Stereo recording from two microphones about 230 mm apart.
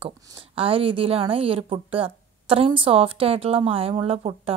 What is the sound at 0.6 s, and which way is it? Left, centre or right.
A woman's voice, right.